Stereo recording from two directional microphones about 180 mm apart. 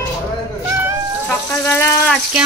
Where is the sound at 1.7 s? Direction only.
15° left (ahead or behind).